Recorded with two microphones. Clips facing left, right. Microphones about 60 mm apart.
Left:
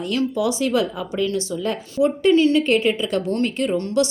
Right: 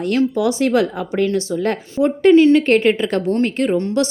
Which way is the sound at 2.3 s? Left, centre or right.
Right.